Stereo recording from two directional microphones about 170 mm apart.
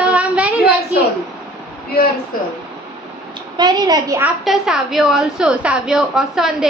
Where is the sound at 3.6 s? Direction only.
25° right (ahead or behind).